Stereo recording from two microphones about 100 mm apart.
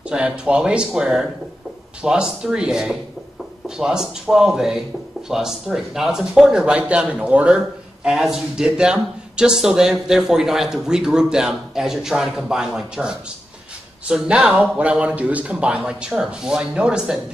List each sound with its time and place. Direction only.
0.1 s speech: 10° right (ahead or behind)